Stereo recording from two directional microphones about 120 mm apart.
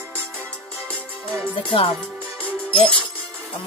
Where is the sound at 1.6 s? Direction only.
50° left (ahead or behind).